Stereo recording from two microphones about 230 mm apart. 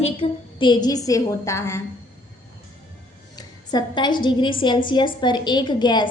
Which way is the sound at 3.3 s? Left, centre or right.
Centre.